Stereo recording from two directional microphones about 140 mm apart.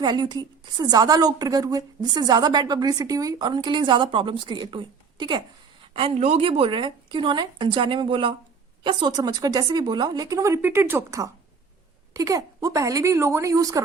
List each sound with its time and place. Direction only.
0.0 s a woman's voice: 30° right (ahead or behind)